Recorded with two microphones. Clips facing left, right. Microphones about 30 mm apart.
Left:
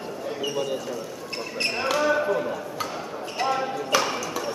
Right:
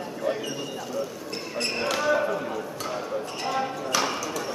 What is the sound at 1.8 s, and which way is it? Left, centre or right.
Basketball bounce, centre.